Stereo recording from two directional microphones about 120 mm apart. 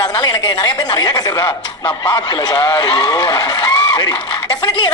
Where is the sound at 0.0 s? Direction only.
35° left (ahead or behind).